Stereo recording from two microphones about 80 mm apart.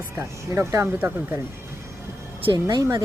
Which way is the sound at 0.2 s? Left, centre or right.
Right.